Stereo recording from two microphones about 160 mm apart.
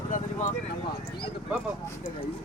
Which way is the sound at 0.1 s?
55° left (ahead or behind).